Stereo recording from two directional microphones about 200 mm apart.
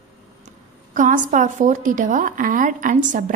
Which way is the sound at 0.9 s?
40° right (ahead or behind).